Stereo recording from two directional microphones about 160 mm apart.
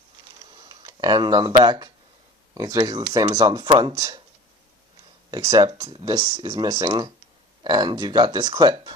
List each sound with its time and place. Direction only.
0.5 s speech: 25° right (ahead or behind)
5.3 s speech: 25° right (ahead or behind)